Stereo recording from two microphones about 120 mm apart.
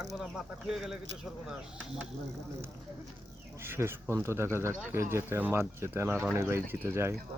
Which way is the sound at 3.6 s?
20° right (ahead or behind).